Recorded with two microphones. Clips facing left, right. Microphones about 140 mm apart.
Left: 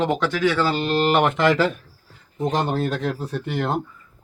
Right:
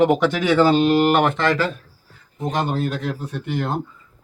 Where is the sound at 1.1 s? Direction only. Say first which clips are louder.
Left 1 dB; 5° left (ahead or behind).